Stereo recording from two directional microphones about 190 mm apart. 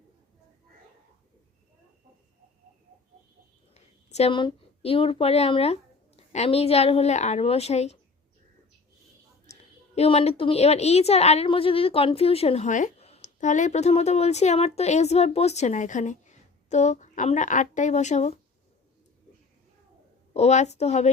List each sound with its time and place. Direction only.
3.8 s a woman's voice: 35° left (ahead or behind)
9.5 s a woman's voice: 35° left (ahead or behind)
20.3 s a woman's voice: 35° left (ahead or behind)